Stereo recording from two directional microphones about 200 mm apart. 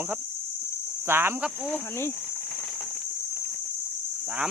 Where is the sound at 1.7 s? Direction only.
15° left (ahead or behind).